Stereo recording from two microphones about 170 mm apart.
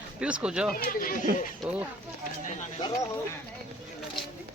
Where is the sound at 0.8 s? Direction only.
55° left (ahead or behind).